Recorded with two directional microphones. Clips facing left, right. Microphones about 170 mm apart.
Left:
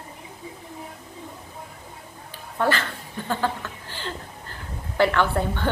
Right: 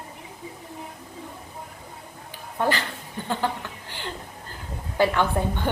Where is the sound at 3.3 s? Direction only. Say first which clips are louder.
Left 1 dB; 15° right (ahead or behind).